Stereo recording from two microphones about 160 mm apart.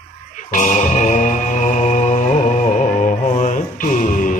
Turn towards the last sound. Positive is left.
turn(degrees=55)  # may be behind; listen again after turning